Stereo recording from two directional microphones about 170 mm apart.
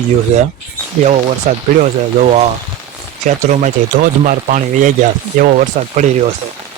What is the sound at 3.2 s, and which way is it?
Speech, 50° right (ahead or behind).